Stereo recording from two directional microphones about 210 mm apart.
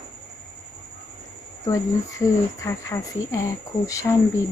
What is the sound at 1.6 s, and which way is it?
Speech, 15° left (ahead or behind).